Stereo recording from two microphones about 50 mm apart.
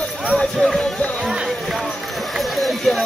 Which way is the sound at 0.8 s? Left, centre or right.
Centre.